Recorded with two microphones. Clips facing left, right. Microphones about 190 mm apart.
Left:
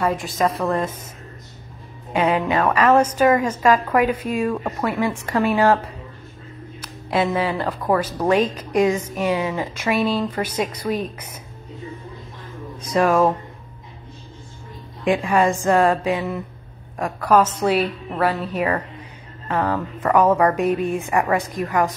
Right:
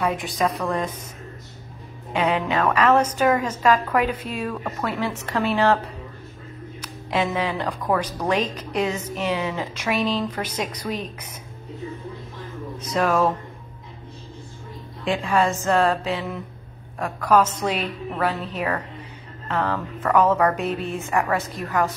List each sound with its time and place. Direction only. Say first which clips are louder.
0.0 s a woman's voice: left 2 dB; centre (ahead or behind)
2.3 s music: left 3 dB; 40° left (ahead or behind)
2.6 s speech: left 2 dB; 10° left (ahead or behind)
6.8 s speech: left 3 dB; 10° left (ahead or behind)
12.8 s speech: left 4 dB; 10° left (ahead or behind)
15.0 s speech: left 3 dB; 15° left (ahead or behind)